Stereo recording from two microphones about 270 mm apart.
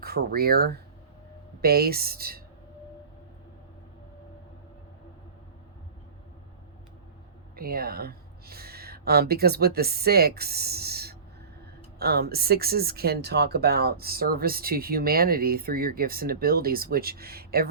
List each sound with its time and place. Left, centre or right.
0.0 s speech: right
7.5 s speech: right